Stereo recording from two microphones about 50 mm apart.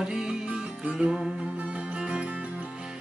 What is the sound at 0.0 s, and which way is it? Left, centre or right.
Music, centre.